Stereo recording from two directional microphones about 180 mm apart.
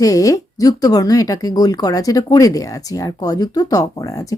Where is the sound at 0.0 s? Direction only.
20° left (ahead or behind).